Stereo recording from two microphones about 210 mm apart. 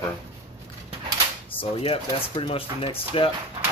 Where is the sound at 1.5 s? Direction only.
25° left (ahead or behind).